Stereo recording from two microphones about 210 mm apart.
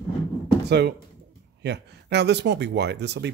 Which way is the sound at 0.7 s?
50° right (ahead or behind).